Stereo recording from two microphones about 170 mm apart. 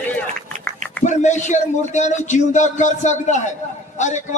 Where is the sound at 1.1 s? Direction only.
45° left (ahead or behind).